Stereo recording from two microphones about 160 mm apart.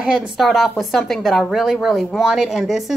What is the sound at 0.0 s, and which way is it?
Speech, 5° right (ahead or behind).